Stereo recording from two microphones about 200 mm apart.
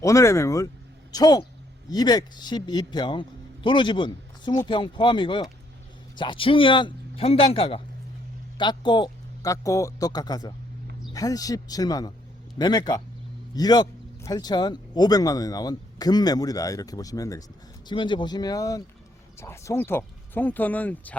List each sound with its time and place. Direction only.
0.0 s speech: 15° left (ahead or behind)